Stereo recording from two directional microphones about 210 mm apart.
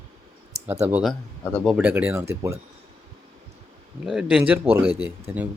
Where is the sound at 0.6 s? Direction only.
10° right (ahead or behind).